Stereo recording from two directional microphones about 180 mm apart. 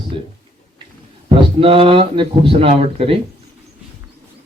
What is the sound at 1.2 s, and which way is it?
Speech, 30° right (ahead or behind).